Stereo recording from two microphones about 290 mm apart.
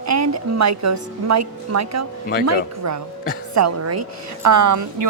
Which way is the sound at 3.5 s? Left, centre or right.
Right.